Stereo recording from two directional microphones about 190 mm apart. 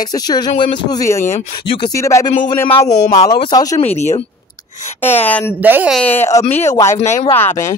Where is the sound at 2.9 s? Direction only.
40° left (ahead or behind).